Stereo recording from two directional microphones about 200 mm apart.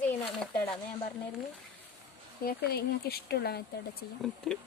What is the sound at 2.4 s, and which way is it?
Speech, 50° left (ahead or behind).